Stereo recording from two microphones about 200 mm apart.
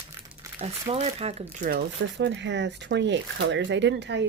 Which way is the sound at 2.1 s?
60° right (ahead or behind).